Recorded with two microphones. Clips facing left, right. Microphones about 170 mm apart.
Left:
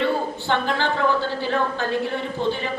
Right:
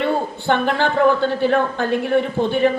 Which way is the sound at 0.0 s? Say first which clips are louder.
Right 2 dB; 55° right (ahead or behind).